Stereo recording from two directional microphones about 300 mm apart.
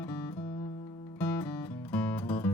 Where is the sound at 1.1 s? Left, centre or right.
Centre.